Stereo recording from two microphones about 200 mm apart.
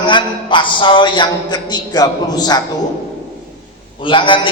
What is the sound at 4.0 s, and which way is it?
Speech, 25° left (ahead or behind).